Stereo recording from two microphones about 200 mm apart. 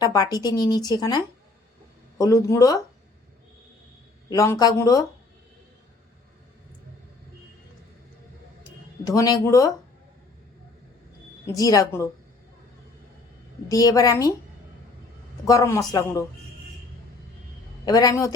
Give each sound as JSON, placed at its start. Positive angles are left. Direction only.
{"t": 0.0, "sound": "speech", "side_deg": 20}
{"t": 4.3, "sound": "speech", "side_deg": 15}
{"t": 9.0, "sound": "speech", "side_deg": 15}
{"t": 11.4, "sound": "speech", "side_deg": 15}
{"t": 13.7, "sound": "speech", "side_deg": 20}
{"t": 15.4, "sound": "speech", "side_deg": 15}
{"t": 17.8, "sound": "speech", "side_deg": 20}